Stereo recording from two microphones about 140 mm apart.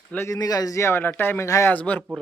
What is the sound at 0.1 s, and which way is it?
Speech, 15° left (ahead or behind).